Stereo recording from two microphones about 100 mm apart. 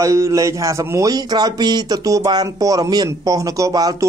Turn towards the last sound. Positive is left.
turn(degrees=-40)  # may be behind; listen again after turning